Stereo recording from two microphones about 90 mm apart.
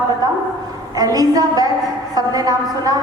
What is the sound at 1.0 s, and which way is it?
A woman's voice, 45° right (ahead or behind).